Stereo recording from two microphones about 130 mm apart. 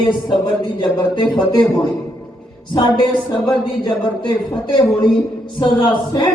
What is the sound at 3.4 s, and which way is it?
Speech, 35° left (ahead or behind).